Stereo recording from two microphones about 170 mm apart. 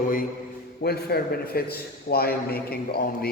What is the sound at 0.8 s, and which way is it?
A man's voice, 65° left (ahead or behind).